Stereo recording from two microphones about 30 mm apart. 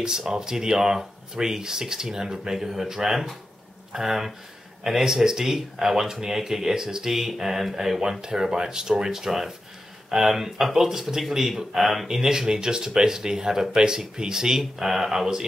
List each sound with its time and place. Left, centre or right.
0.3 s speech: centre
7.1 s speech: centre
12.2 s speech: centre